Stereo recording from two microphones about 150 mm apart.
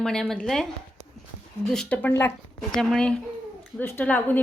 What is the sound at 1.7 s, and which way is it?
A woman's voice, 5° left (ahead or behind).